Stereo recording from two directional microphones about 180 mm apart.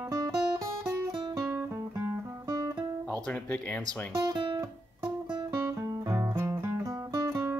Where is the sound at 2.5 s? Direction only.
20° right (ahead or behind).